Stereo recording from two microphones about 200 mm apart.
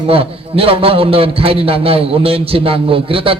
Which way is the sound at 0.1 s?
30° right (ahead or behind).